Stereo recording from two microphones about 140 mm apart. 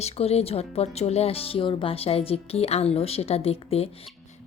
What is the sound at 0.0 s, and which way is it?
A woman's voice, 45° left (ahead or behind).